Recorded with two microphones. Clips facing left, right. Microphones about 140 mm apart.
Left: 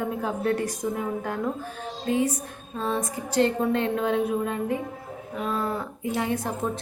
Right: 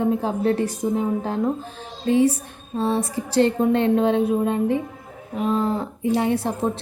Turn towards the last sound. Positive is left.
turn(degrees=-25)  # may be behind; listen again after turning